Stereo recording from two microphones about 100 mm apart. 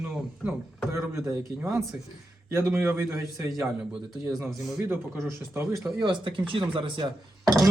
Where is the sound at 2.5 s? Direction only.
25° right (ahead or behind).